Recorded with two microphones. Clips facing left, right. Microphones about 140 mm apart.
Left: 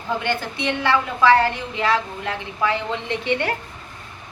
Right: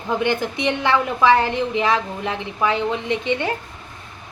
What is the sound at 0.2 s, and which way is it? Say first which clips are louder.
A woman's voice: right 4 dB; 15° right (ahead or behind).